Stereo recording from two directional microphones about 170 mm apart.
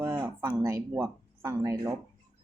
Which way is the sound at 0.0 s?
15° right (ahead or behind).